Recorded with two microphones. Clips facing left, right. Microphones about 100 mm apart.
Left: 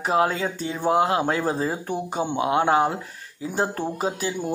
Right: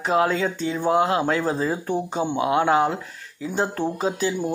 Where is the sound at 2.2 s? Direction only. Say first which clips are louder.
Even; 20° left (ahead or behind).